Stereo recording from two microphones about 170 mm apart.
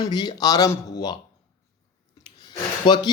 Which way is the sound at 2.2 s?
25° left (ahead or behind).